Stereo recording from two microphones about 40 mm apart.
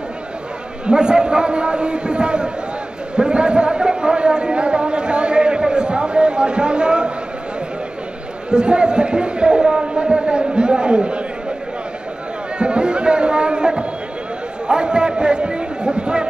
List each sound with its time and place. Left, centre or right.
0.8 s a sound: right
8.5 s a man's voice: right
12.5 s music: right
14.7 s a man's voice: right